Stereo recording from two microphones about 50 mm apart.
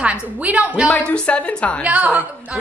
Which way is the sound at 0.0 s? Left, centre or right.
Right.